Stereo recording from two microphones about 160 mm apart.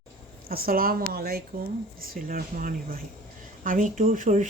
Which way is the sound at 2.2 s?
55° right (ahead or behind).